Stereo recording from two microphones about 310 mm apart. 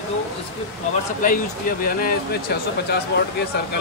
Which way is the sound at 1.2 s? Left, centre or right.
Left.